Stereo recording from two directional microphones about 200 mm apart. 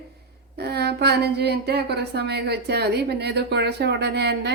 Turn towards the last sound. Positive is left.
turn(degrees=-55)  # may be behind; listen again after turning